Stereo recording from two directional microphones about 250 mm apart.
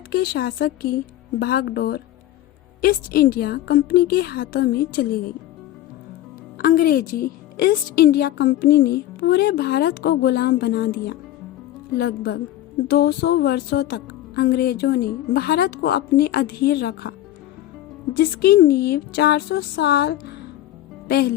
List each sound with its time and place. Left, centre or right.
0.1 s a woman's voice: left
6.6 s a woman's voice: left